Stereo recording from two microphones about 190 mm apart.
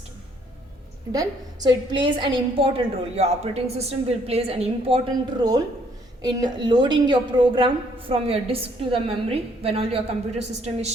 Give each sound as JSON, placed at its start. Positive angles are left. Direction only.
{"t": 1.1, "sound": "a woman's voice", "side_deg": -20}
{"t": 5.4, "sound": "a woman's voice", "side_deg": -20}